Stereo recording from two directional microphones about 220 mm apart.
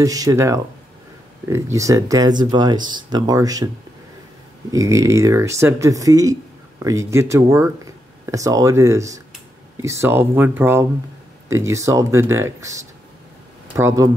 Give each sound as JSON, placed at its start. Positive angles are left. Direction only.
{"t": 0.0, "sound": "speech", "side_deg": -15}
{"t": 4.6, "sound": "speech", "side_deg": -15}